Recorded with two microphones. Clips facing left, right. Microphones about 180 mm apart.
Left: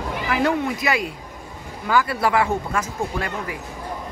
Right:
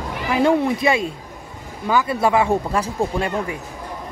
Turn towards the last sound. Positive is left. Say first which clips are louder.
# right 5 dB
turn(degrees=-30)  # may be behind; listen again after turning